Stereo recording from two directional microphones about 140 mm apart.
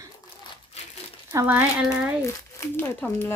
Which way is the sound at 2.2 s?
20° left (ahead or behind).